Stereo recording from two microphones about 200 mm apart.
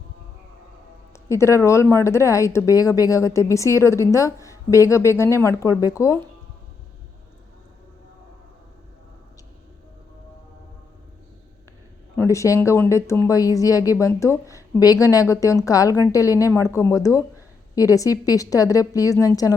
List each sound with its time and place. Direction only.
1.1 s speech: 15° left (ahead or behind)
12.1 s speech: 15° left (ahead or behind)